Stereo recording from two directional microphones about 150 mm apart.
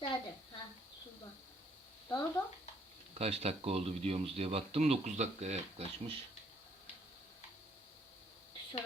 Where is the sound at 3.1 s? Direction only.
45° right (ahead or behind).